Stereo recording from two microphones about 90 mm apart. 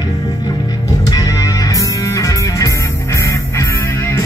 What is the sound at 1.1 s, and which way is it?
Music, 40° left (ahead or behind).